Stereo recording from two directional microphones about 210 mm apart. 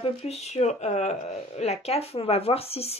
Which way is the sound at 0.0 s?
30° left (ahead or behind).